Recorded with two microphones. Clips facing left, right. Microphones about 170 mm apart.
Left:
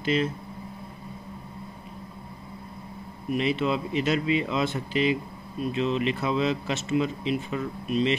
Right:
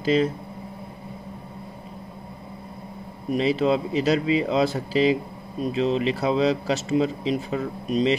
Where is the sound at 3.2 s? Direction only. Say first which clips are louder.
Right 4 dB; 35° right (ahead or behind).